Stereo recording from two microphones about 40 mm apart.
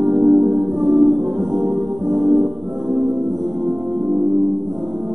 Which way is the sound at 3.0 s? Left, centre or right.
Centre.